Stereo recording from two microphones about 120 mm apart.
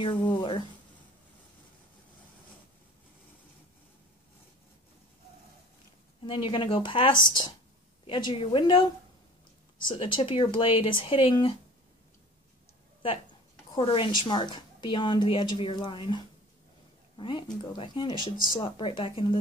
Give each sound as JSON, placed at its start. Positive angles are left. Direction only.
{"t": 0.0, "sound": "a woman's voice", "side_deg": 40}
{"t": 6.2, "sound": "a woman's voice", "side_deg": 45}
{"t": 13.7, "sound": "a woman's voice", "side_deg": 45}